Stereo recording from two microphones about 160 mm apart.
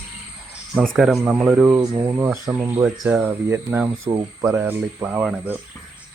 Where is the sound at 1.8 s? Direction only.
20° right (ahead or behind).